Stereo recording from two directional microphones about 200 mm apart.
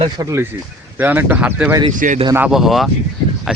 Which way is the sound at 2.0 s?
40° right (ahead or behind).